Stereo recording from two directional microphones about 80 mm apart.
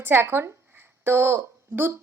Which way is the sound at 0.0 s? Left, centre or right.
Right.